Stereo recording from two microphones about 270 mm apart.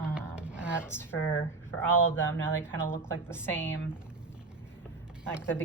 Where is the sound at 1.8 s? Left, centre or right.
Centre.